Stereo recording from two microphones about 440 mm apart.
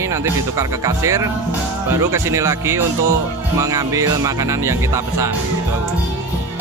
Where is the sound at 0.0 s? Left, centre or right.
Centre.